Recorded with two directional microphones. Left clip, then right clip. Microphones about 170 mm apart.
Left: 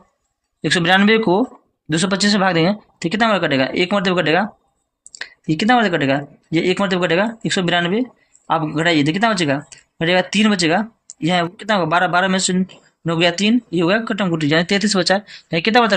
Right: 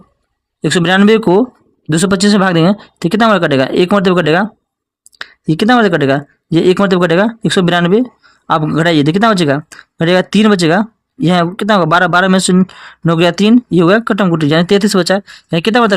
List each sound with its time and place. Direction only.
0.6 s speech: 50° right (ahead or behind)